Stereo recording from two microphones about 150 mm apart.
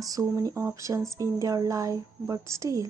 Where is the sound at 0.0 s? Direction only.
25° right (ahead or behind).